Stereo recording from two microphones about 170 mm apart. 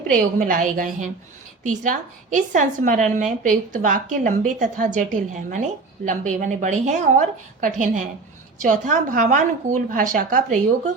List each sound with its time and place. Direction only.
0.1 s a woman's voice: 50° right (ahead or behind)